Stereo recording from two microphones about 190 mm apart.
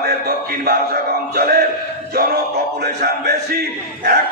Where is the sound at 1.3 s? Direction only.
50° right (ahead or behind).